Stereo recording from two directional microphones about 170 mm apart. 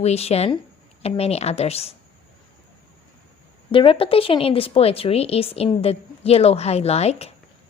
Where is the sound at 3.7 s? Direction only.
30° left (ahead or behind).